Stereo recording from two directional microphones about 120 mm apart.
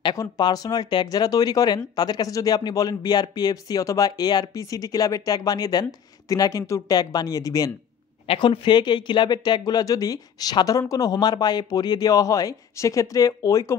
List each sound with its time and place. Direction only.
0.0 s speech: 35° left (ahead or behind)
8.3 s speech: 40° left (ahead or behind)